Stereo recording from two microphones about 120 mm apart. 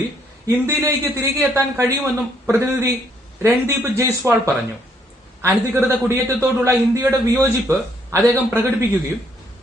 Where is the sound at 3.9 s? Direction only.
20° right (ahead or behind).